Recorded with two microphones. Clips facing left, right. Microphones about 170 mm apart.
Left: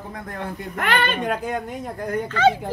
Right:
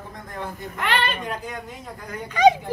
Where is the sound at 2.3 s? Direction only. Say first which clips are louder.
Right 3 dB; 15° right (ahead or behind).